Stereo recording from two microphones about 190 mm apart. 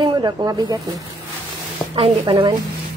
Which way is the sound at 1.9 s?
25° right (ahead or behind).